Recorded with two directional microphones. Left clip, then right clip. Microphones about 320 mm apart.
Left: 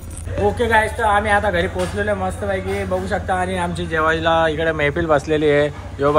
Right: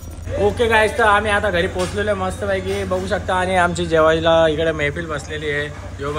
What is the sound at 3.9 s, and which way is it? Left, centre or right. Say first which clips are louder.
Speech: right 1 dB; centre.